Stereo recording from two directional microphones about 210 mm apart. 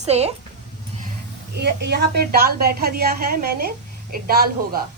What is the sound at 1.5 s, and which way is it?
A woman's voice, 50° right (ahead or behind).